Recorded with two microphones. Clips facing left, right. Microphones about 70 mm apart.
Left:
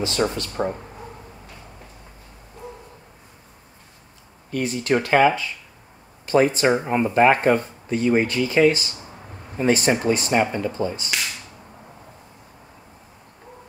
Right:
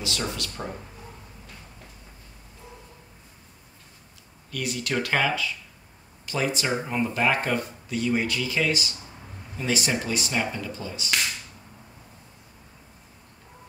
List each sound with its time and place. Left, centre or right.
0.0 s speech: left
4.5 s speech: left